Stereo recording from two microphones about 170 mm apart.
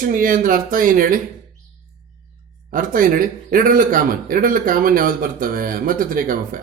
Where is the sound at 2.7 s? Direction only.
55° right (ahead or behind).